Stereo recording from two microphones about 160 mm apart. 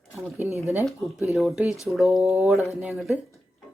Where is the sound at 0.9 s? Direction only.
Centre (ahead or behind).